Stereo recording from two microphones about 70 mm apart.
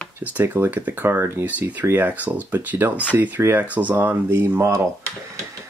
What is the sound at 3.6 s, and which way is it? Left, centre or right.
Speech, right.